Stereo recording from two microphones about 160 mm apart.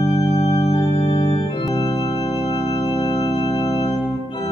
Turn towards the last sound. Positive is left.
turn(degrees=35)  # may be behind; listen again after turning